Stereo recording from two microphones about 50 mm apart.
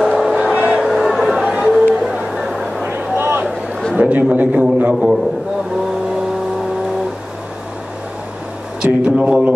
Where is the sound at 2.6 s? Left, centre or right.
Centre.